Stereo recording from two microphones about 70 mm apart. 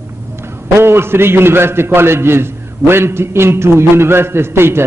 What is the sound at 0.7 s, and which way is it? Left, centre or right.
A man's voice, right.